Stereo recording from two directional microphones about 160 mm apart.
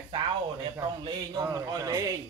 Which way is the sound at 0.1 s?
30° right (ahead or behind).